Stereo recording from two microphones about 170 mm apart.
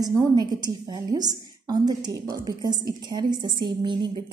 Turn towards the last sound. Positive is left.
turn(degrees=-25)  # may be behind; listen again after turning